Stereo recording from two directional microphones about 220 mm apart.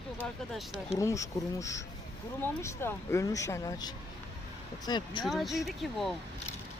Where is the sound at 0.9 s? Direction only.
15° left (ahead or behind).